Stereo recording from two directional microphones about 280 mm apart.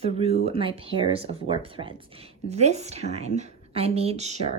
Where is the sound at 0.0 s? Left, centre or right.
Right.